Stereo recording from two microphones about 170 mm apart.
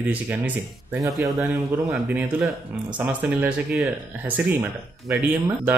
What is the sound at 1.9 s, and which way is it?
Speech, 5° right (ahead or behind).